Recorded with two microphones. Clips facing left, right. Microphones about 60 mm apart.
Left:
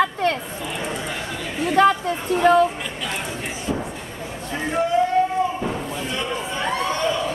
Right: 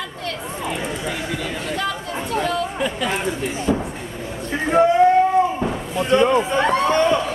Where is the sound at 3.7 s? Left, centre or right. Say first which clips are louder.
Right 5 dB; right.